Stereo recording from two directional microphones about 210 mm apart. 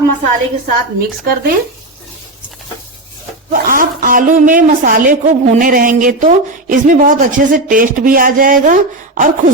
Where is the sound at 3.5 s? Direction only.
40° right (ahead or behind).